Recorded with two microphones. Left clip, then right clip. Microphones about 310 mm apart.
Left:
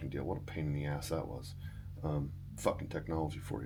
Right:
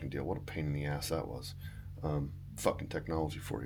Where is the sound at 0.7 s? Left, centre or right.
Right.